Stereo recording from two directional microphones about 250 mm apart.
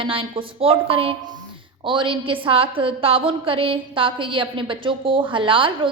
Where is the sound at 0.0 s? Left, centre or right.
Right.